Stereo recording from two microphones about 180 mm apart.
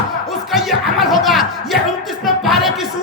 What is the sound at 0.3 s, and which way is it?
Music, centre (ahead or behind).